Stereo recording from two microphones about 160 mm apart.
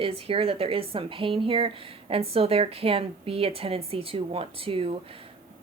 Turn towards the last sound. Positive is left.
turn(degrees=-35)  # may be behind; listen again after turning